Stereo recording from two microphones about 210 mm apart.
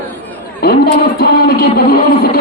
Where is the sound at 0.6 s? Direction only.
50° left (ahead or behind).